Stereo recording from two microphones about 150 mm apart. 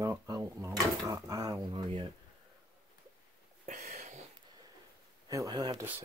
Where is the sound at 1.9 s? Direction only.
35° right (ahead or behind).